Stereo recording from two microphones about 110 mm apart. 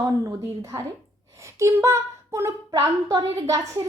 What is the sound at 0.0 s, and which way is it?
A woman's voice, 30° right (ahead or behind).